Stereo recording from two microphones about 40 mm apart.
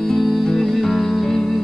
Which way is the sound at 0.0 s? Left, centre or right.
Centre.